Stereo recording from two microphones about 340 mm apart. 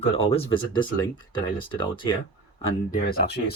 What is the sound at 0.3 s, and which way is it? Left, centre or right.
Speech, centre.